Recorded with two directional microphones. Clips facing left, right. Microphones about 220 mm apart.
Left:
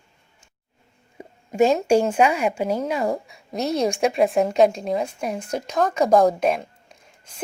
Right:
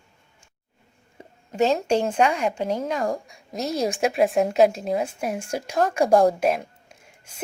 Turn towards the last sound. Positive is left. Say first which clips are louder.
# left 1 dB
turn(degrees=-5)  # may be behind; listen again after turning